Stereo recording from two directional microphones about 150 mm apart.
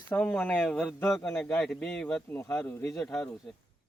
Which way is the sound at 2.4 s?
20° left (ahead or behind).